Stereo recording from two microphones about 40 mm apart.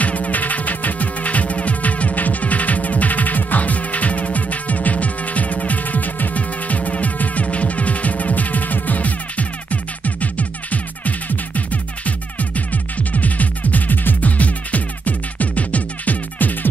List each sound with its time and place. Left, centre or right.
0.0 s music: left